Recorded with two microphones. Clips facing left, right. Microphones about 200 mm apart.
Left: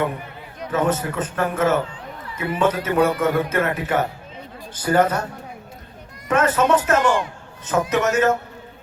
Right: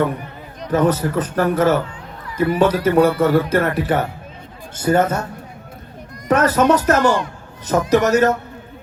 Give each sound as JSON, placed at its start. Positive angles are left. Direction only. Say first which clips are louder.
{"t": 0.7, "sound": "speech", "louder": "right 5 dB", "side_deg": -35}
{"t": 4.8, "sound": "a man's voice", "louder": "right 2 dB", "side_deg": -25}
{"t": 6.2, "sound": "speech", "louder": "right 4 dB", "side_deg": -40}